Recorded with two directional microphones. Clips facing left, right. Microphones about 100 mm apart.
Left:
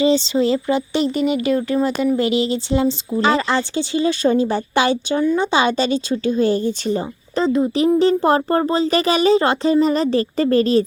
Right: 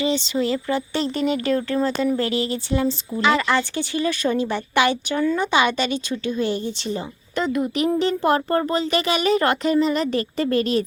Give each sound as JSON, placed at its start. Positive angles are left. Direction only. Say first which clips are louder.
{"t": 0.0, "sound": "speech", "louder": "left 6 dB", "side_deg": 30}
{"t": 1.1, "sound": "speech", "louder": "left 1 dB", "side_deg": 5}
{"t": 3.2, "sound": "speech", "louder": "left 1 dB", "side_deg": 35}